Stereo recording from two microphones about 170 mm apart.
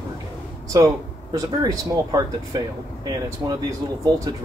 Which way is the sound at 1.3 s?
20° right (ahead or behind).